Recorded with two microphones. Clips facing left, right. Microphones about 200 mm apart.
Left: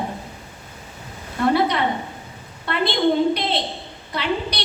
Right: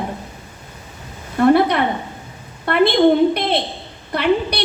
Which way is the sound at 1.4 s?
55° right (ahead or behind).